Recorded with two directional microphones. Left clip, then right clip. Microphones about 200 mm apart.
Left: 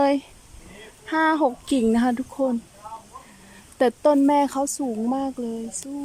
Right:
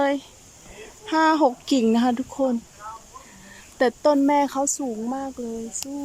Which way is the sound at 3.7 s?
Centre (ahead or behind).